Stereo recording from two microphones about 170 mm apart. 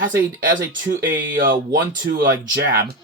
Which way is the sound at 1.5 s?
75° right (ahead or behind).